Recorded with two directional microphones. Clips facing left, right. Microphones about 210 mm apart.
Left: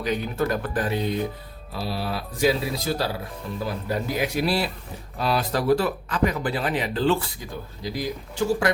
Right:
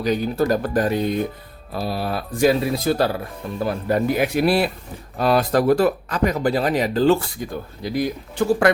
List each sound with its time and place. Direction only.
0.0 s speech: 35° right (ahead or behind)
7.8 s speech: 60° right (ahead or behind)